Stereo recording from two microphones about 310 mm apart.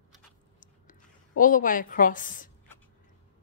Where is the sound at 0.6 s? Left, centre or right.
Left.